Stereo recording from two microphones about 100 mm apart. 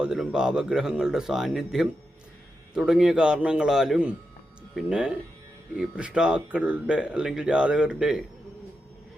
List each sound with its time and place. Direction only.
0.0 s speech: 5° right (ahead or behind)